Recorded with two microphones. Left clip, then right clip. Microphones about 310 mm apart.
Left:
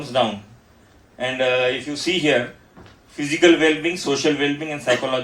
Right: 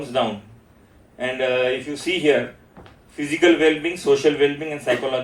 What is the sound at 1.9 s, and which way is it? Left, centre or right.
Speech, left.